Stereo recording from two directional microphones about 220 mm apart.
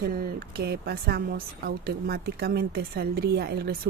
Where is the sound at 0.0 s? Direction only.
45° right (ahead or behind).